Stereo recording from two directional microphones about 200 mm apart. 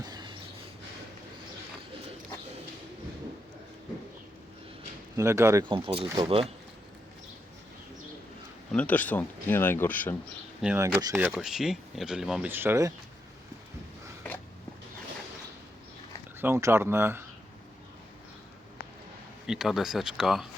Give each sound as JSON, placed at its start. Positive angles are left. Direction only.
{"t": 0.0, "sound": "a sound", "side_deg": -20}
{"t": 5.1, "sound": "speech", "side_deg": -15}
{"t": 5.6, "sound": "speech", "side_deg": -25}
{"t": 8.7, "sound": "speech", "side_deg": 5}
{"t": 10.6, "sound": "speech", "side_deg": -5}
{"t": 16.4, "sound": "speech", "side_deg": -15}
{"t": 19.5, "sound": "speech", "side_deg": 0}